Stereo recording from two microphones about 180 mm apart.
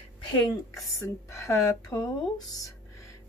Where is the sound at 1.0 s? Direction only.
15° left (ahead or behind).